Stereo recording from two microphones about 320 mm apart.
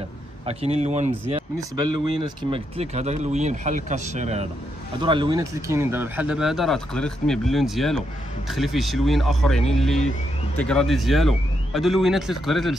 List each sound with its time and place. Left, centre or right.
0.5 s speech: centre
2.2 s speech: centre